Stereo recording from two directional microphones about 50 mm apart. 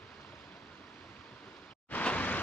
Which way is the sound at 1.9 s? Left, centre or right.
Left.